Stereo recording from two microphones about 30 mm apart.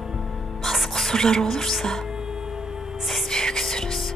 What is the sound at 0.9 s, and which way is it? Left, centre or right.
Speech, centre.